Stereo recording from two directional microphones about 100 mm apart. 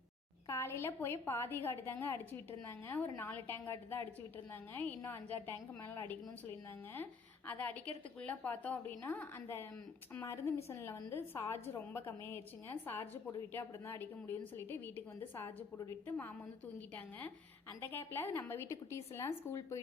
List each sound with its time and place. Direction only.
0.4 s a woman's voice: 25° left (ahead or behind)